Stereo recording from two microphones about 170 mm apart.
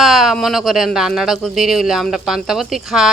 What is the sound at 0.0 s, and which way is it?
Speech, centre (ahead or behind).